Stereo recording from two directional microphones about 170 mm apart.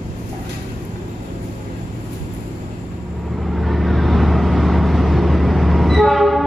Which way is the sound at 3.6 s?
Centre (ahead or behind).